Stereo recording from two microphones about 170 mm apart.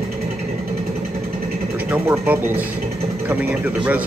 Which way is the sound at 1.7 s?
10° right (ahead or behind).